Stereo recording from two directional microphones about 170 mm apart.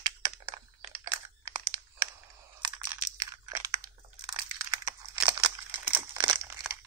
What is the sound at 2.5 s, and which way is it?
Crunch, 25° right (ahead or behind).